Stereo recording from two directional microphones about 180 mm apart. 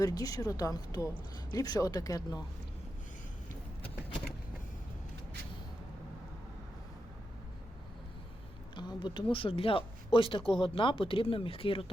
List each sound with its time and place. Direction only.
0.0 s speech: 20° left (ahead or behind)
8.7 s a sound: 25° left (ahead or behind)
9.3 s speech: 30° left (ahead or behind)